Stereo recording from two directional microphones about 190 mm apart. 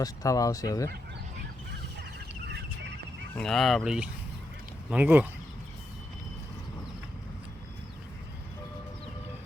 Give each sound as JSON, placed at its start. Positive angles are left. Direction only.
{"t": 0.0, "sound": "speech", "side_deg": 20}
{"t": 3.3, "sound": "speech", "side_deg": 0}